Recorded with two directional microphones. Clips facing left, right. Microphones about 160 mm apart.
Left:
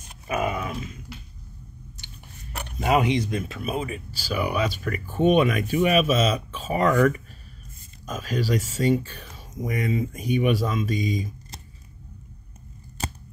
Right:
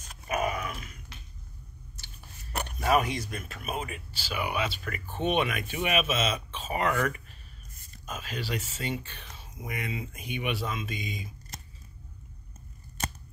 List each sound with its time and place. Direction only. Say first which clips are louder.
0.3 s dog: left 4 dB; 30° left (ahead or behind)
2.8 s speech: left 5 dB; 20° left (ahead or behind); by 11.6 s 40° left (ahead or behind)